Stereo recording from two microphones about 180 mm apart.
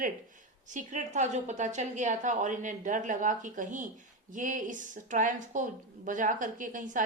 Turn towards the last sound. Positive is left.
turn(degrees=-45)  # may be behind; listen again after turning